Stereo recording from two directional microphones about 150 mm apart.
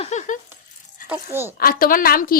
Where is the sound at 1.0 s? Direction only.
15° right (ahead or behind).